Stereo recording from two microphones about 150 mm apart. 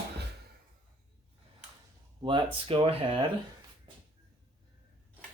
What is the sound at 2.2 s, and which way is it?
Speech, 35° right (ahead or behind).